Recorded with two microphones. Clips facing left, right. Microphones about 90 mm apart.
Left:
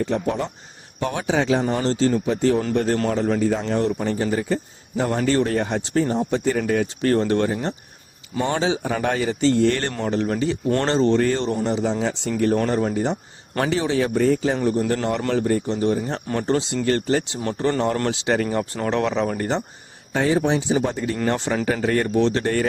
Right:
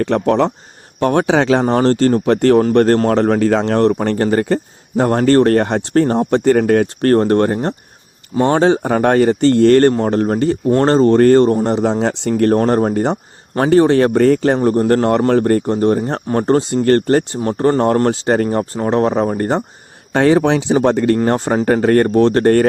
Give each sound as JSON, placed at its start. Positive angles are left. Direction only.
{"t": 0.0, "sound": "speech", "side_deg": -70}
{"t": 0.9, "sound": "speech", "side_deg": -60}
{"t": 12.5, "sound": "speech", "side_deg": -45}
{"t": 17.4, "sound": "speech", "side_deg": -40}
{"t": 20.1, "sound": "speech", "side_deg": -70}
{"t": 20.8, "sound": "speech", "side_deg": -65}
{"t": 21.2, "sound": "speech", "side_deg": -45}